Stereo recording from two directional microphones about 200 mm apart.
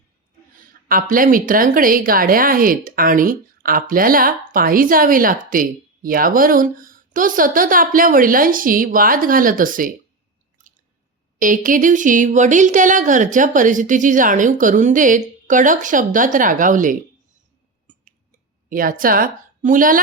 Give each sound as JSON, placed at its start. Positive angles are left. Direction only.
{"t": 1.1, "sound": "speech", "side_deg": -45}
{"t": 11.3, "sound": "speech", "side_deg": -40}
{"t": 18.7, "sound": "speech", "side_deg": -45}